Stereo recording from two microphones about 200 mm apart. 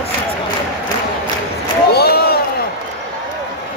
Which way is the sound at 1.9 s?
50° left (ahead or behind).